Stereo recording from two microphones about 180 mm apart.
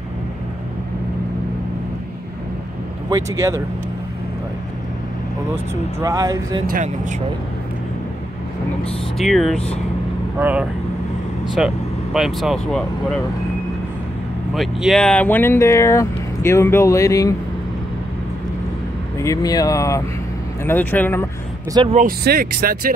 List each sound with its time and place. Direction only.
3.1 s speech: 15° right (ahead or behind)
5.9 s speech: 20° right (ahead or behind)
6.7 s speech: 45° right (ahead or behind)
9.2 s speech: centre (ahead or behind)
14.5 s speech: centre (ahead or behind); by 17.3 s 15° left (ahead or behind)
19.1 s speech: 15° left (ahead or behind)
21.9 s speech: 55° right (ahead or behind)